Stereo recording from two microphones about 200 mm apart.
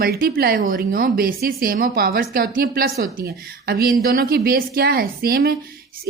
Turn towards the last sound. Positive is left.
turn(degrees=-50)  # may be behind; listen again after turning